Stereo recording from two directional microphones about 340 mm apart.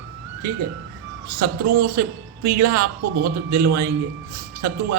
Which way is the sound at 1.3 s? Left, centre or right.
Right.